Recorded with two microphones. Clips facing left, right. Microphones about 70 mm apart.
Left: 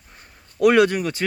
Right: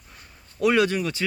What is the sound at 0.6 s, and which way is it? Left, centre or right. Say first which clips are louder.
Speech: left 5 dB; left.